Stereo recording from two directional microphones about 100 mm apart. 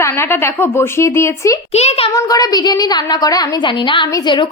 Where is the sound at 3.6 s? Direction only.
55° left (ahead or behind).